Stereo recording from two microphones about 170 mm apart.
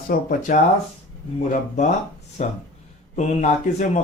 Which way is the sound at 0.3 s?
50° left (ahead or behind).